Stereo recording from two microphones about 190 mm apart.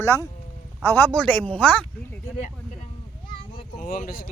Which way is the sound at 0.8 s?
10° left (ahead or behind).